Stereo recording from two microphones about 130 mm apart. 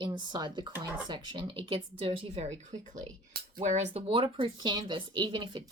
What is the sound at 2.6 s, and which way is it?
Speech, 75° right (ahead or behind).